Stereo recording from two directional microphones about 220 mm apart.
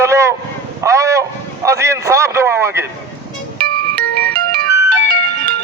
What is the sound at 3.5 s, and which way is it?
Music, 40° right (ahead or behind).